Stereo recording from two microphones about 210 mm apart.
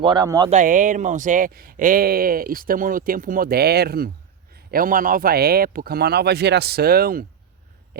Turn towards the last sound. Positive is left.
turn(degrees=-45)  # may be behind; listen again after turning